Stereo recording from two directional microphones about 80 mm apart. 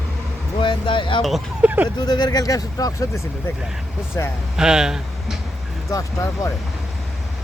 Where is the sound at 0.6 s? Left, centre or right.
Left.